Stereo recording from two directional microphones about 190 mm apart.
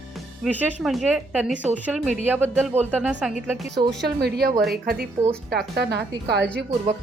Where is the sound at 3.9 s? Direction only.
60° right (ahead or behind).